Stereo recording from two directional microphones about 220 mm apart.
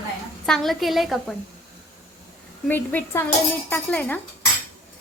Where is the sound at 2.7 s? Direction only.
10° left (ahead or behind).